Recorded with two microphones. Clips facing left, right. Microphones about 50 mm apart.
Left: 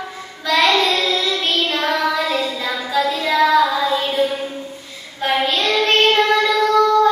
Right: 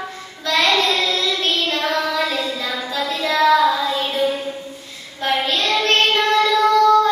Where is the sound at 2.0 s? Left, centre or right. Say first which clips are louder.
Left 2 dB; left.